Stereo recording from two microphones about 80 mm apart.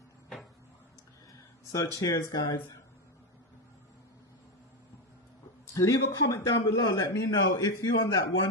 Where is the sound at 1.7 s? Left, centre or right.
Left.